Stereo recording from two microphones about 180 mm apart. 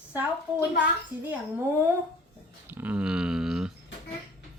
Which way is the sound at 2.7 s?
10° right (ahead or behind).